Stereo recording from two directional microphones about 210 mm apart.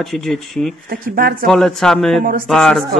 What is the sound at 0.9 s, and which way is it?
Speech, 45° right (ahead or behind).